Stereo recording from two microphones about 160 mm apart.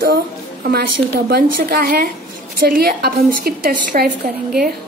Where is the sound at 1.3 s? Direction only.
70° right (ahead or behind).